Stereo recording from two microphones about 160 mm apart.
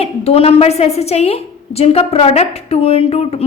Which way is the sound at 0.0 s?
40° left (ahead or behind).